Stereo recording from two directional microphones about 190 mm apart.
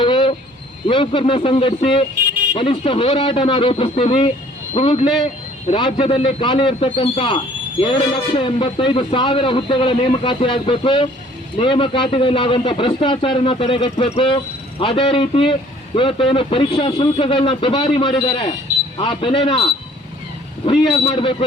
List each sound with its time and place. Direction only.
0.0 s cricket: 25° left (ahead or behind)
0.9 s a man's voice: 25° left (ahead or behind)
20.7 s speech: 25° left (ahead or behind)